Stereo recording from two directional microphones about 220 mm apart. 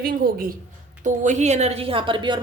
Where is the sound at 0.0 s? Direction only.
40° right (ahead or behind).